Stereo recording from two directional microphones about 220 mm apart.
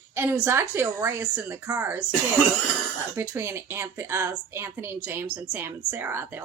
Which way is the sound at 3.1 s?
10° right (ahead or behind).